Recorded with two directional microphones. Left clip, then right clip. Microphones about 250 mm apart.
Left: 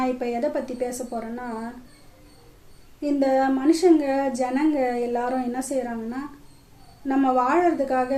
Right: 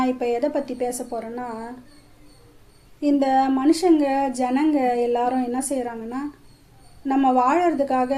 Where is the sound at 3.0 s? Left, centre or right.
Right.